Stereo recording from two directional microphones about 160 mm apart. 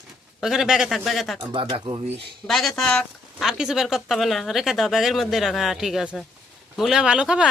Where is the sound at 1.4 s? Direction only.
30° right (ahead or behind).